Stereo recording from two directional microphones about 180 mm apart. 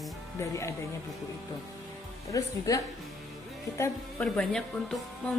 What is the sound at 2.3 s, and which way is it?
Speech, 20° left (ahead or behind).